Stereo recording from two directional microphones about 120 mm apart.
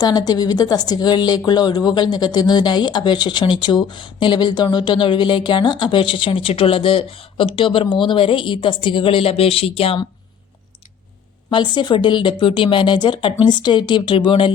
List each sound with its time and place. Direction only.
0.0 s speech: 35° left (ahead or behind); by 10.0 s 50° left (ahead or behind)
11.5 s speech: 40° left (ahead or behind)